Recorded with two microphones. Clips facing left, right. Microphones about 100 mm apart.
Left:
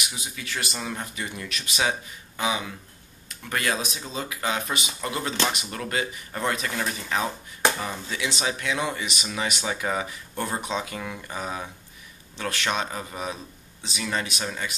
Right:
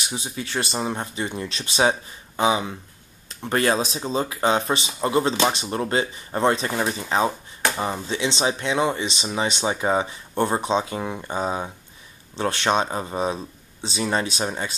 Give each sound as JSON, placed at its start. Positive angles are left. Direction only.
{"t": 0.0, "sound": "speech", "side_deg": -30}